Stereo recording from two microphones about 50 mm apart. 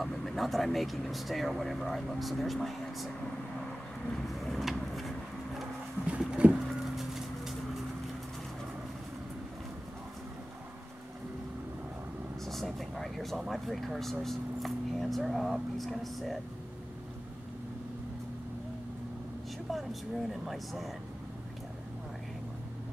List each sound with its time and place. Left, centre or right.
0.0 s speech: centre
4.1 s vehicle: centre
6.0 s a sound: right
6.5 s a sound: centre
12.4 s vehicle: centre
13.5 s speech: centre
19.7 s speech: centre